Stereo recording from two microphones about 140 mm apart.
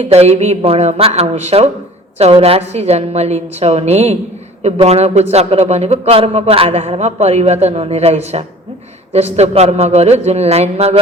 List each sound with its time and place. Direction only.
0.0 s a man's voice: 50° right (ahead or behind)